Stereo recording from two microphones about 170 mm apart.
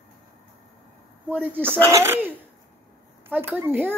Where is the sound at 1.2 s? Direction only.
10° right (ahead or behind).